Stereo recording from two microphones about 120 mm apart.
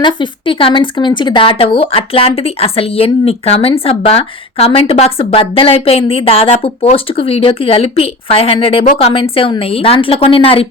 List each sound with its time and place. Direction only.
0.0 s speech: 40° left (ahead or behind)